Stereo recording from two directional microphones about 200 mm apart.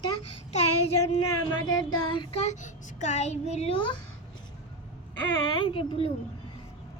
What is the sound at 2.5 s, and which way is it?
A child's voice, 35° left (ahead or behind).